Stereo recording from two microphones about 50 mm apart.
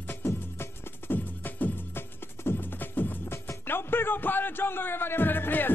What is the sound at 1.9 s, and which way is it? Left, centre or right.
Music, left.